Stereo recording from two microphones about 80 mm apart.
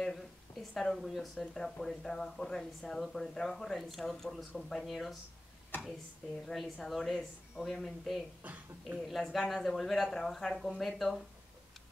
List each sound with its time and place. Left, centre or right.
0.0 s speech: centre
6.4 s speech: centre
8.4 s speech: centre
9.0 s speech: centre